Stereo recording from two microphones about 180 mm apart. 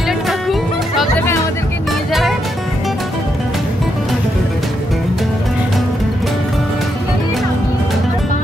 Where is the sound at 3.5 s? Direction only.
Centre (ahead or behind).